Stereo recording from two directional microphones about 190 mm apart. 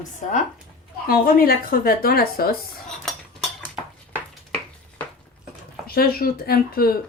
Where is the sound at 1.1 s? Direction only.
50° left (ahead or behind).